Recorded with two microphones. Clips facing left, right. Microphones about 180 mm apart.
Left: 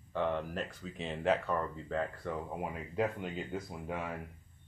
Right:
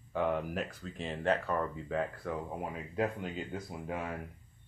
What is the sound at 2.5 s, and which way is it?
Speech, 5° left (ahead or behind).